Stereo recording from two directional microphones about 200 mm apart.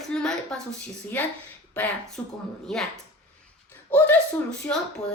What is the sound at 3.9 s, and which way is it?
Speech, 10° left (ahead or behind).